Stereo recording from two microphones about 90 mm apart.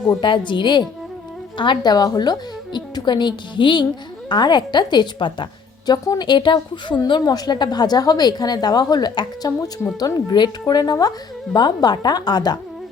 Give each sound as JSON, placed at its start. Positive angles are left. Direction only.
{"t": 0.2, "sound": "a woman's voice", "side_deg": 60}
{"t": 7.1, "sound": "a woman's voice", "side_deg": 50}